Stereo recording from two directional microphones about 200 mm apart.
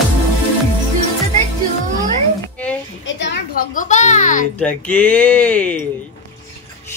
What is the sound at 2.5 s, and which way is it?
Music, 5° left (ahead or behind).